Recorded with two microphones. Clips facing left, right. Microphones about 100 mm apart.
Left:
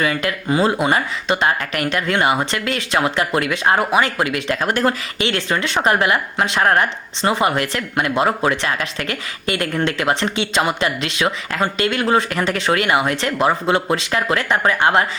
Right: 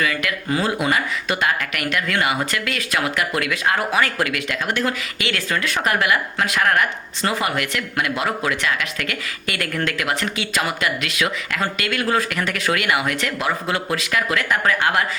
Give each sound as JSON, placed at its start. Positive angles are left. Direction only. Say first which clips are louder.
{"t": 0.0, "sound": "speech", "louder": "left 3 dB", "side_deg": 30}
{"t": 4.6, "sound": "speech", "louder": "left 4 dB", "side_deg": 40}